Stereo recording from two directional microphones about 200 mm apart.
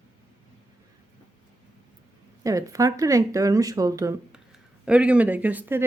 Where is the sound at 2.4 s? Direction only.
15° right (ahead or behind).